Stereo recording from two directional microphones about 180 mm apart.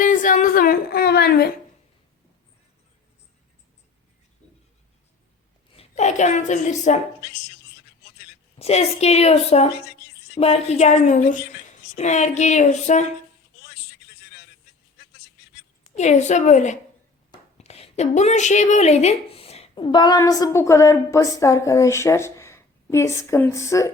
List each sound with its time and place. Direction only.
0.0 s a sound: 45° left (ahead or behind)
5.7 s a woman's voice: 35° left (ahead or behind)
8.5 s a woman's voice: 35° left (ahead or behind)
16.0 s a woman's voice: 40° left (ahead or behind); by 23.9 s 15° left (ahead or behind)